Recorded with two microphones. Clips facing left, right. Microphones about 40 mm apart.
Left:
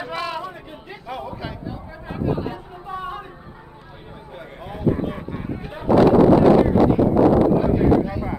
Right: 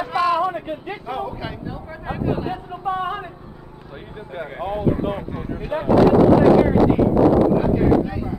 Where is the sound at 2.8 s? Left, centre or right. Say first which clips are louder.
Right 7 dB; right.